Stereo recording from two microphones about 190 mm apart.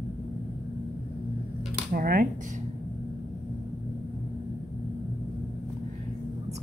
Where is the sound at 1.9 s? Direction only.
50° right (ahead or behind).